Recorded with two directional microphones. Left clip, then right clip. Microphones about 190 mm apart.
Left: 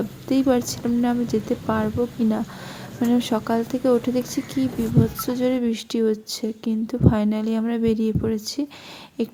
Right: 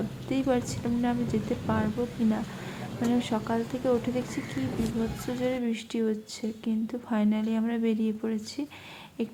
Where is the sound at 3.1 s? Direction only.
30° left (ahead or behind).